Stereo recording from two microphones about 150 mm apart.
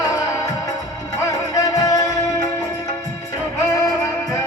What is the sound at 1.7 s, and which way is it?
Music, 25° left (ahead or behind).